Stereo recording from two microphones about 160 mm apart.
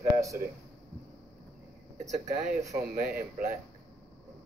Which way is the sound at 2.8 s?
65° right (ahead or behind).